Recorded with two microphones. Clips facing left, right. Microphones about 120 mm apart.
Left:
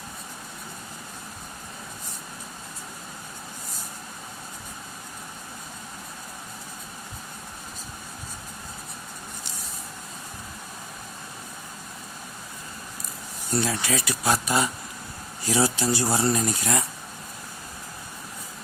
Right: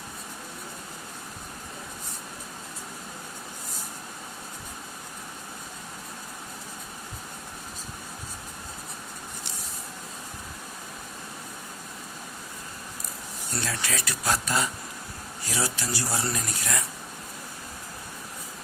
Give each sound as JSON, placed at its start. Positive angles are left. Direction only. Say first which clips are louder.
{"t": 13.6, "sound": "speech", "louder": "left 6 dB", "side_deg": 10}
{"t": 15.4, "sound": "speech", "louder": "left 8 dB", "side_deg": 25}